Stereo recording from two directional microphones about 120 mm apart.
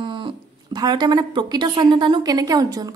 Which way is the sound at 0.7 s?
35° right (ahead or behind).